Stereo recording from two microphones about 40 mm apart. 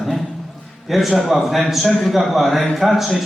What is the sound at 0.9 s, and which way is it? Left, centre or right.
A man's voice, centre.